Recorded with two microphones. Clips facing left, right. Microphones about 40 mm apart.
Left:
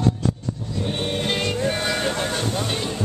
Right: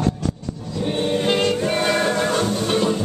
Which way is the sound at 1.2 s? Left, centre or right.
Right.